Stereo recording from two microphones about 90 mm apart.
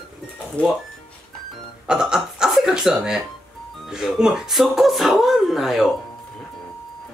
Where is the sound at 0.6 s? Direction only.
15° left (ahead or behind).